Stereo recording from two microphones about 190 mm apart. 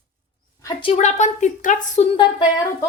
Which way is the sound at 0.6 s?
30° left (ahead or behind).